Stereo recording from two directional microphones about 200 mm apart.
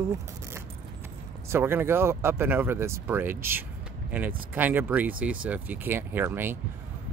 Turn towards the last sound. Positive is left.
turn(degrees=-10)  # may be behind; listen again after turning